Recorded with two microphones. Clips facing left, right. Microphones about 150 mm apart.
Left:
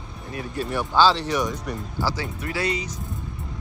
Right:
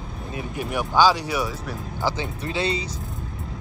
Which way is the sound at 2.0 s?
20° right (ahead or behind).